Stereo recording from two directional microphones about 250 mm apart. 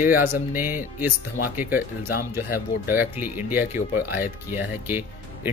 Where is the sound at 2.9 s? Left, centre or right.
Centre.